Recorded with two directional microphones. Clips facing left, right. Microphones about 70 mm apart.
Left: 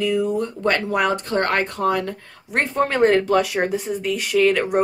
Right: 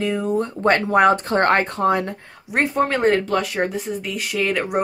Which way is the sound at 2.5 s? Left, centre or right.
Centre.